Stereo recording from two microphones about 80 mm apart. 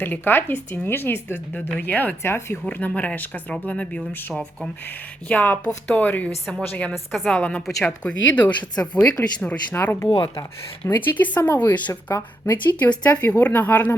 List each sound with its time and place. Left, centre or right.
0.0 s speech: left
2.6 s speech: left
6.9 s a woman's voice: centre
7.3 s speech: centre
7.7 s a woman's voice: centre
8.0 s speech: centre
9.7 s speech: left